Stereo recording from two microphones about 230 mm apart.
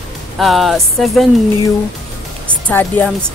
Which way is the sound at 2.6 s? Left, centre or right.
Centre.